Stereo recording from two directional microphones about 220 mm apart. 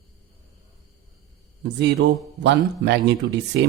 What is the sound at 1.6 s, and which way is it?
A man's voice, 50° right (ahead or behind).